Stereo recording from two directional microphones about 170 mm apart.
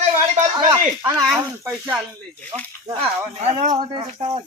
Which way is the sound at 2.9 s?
35° right (ahead or behind).